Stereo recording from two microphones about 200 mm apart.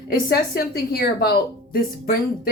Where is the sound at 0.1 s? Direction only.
50° left (ahead or behind).